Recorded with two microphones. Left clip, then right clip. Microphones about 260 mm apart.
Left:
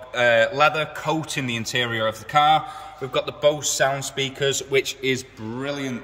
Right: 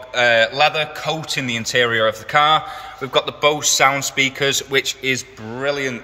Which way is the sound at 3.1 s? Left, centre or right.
Centre.